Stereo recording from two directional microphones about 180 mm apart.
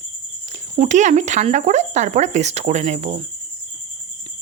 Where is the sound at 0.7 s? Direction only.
40° right (ahead or behind).